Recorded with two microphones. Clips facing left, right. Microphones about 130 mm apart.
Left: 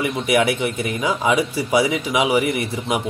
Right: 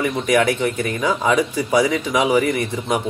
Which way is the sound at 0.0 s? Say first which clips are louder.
Right 1 dB; 10° left (ahead or behind).